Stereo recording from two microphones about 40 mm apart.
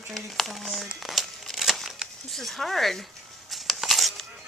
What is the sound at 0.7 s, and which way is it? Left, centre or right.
Crumpling, centre.